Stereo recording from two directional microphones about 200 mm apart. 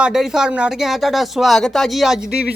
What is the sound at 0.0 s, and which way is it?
A man's voice, 5° right (ahead or behind).